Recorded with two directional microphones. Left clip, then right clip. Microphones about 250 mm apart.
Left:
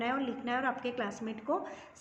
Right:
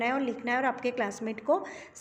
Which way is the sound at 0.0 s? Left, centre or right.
Right.